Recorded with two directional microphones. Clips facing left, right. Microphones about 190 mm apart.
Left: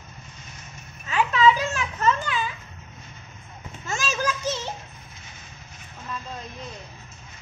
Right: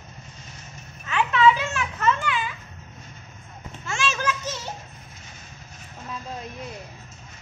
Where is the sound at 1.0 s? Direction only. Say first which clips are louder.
Even; 35° left (ahead or behind).